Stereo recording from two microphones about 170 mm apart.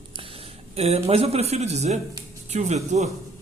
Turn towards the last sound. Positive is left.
turn(degrees=-40)  # may be behind; listen again after turning